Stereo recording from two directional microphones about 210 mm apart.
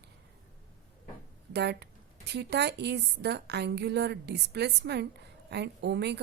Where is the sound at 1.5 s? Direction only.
55° right (ahead or behind).